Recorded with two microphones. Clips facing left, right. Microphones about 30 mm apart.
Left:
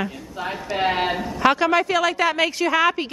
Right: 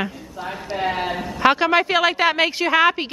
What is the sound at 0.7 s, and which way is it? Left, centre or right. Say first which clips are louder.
Speech: left 2 dB; left.